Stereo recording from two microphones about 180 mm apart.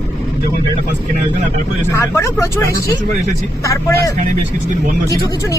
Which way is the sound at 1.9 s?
15° left (ahead or behind).